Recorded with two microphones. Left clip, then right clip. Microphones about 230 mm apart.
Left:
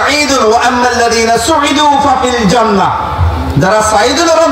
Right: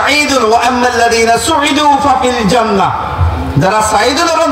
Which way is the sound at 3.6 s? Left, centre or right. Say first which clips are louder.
Left 1 dB; right.